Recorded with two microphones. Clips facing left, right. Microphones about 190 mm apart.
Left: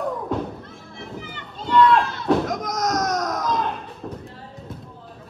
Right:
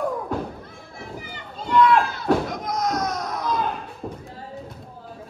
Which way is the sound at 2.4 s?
45° left (ahead or behind).